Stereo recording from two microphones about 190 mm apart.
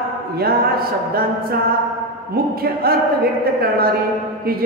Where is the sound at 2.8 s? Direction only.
50° right (ahead or behind).